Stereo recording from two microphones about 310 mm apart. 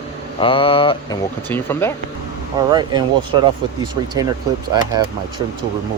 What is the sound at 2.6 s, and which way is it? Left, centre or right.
Speech, centre.